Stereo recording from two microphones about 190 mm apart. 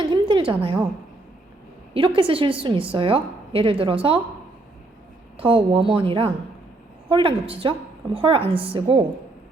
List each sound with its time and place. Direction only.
0.0 s a sound: 25° right (ahead or behind)
1.9 s a woman's voice: 25° right (ahead or behind)
5.4 s a woman's voice: 30° right (ahead or behind)